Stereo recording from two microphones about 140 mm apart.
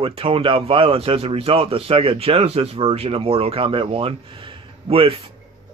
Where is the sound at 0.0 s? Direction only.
40° right (ahead or behind).